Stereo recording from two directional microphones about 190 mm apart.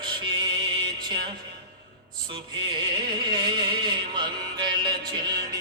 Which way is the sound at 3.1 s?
25° right (ahead or behind).